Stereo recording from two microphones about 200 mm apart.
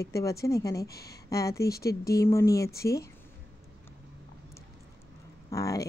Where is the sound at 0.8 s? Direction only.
50° left (ahead or behind).